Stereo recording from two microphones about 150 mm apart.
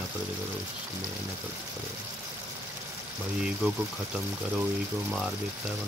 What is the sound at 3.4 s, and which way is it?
Speech, 5° right (ahead or behind).